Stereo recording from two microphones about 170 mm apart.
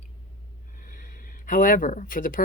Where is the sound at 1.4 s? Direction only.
55° left (ahead or behind).